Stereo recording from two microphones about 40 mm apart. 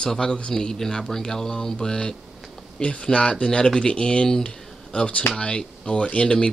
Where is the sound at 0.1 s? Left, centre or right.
Centre.